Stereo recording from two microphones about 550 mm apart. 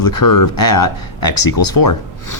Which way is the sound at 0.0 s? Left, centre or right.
Left.